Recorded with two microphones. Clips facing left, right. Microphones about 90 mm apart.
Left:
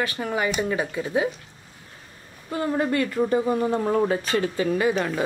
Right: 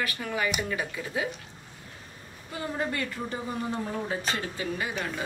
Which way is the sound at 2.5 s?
50° left (ahead or behind).